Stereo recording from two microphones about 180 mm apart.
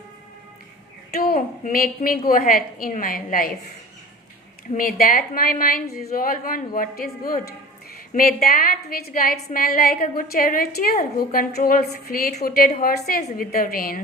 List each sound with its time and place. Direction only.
1.1 s a woman's voice: 55° left (ahead or behind)
4.7 s a woman's voice: 50° left (ahead or behind)